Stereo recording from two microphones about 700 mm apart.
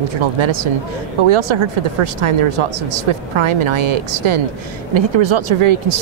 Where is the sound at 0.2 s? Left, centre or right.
Right.